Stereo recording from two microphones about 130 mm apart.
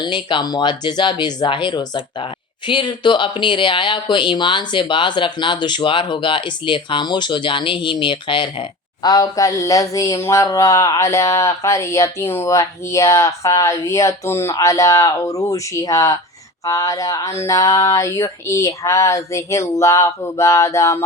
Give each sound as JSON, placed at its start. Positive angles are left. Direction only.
{"t": 0.0, "sound": "speech", "side_deg": 35}
{"t": 9.0, "sound": "speech", "side_deg": 30}